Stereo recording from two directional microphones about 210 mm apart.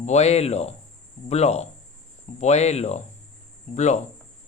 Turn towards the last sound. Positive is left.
turn(degrees=35)  # may be behind; listen again after turning